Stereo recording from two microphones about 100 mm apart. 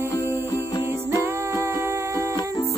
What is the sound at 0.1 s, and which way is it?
Music, 30° left (ahead or behind).